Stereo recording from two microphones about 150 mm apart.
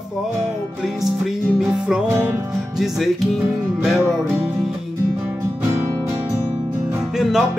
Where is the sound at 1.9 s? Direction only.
5° right (ahead or behind).